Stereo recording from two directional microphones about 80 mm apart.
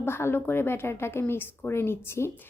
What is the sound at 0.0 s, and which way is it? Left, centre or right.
A woman's voice, left.